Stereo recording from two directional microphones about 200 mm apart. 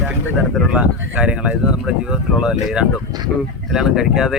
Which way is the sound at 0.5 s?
5° right (ahead or behind).